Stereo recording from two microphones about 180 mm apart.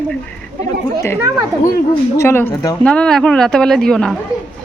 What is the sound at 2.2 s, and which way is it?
Speech, 15° left (ahead or behind).